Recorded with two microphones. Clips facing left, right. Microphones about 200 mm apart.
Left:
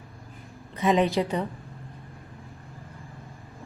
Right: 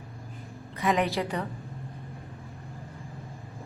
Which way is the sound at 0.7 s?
20° left (ahead or behind).